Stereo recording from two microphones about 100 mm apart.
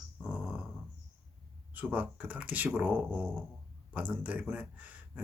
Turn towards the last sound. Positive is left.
turn(degrees=-15)  # may be behind; listen again after turning